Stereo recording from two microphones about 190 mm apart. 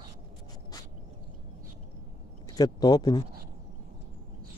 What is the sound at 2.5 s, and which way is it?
Speech, 20° left (ahead or behind).